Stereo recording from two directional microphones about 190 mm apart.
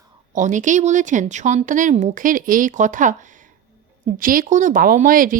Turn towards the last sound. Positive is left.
turn(degrees=-45)  # may be behind; listen again after turning